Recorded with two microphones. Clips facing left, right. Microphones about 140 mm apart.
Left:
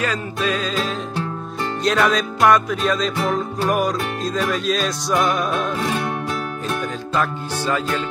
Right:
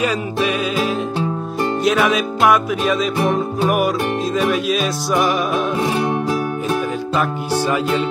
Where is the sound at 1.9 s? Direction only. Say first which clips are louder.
Even; 5° right (ahead or behind).